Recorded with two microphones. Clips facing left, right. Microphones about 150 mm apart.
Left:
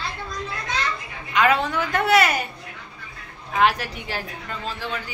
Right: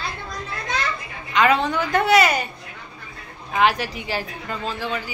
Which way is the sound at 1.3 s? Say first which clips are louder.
Right 1 dB; 5° left (ahead or behind).